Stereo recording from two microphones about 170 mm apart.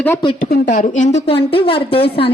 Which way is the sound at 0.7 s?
45° left (ahead or behind).